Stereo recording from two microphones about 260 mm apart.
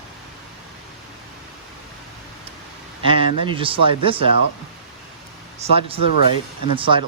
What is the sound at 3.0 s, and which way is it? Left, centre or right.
Speech, right.